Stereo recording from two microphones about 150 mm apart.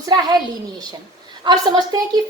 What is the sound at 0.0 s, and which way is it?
Speech, 25° right (ahead or behind).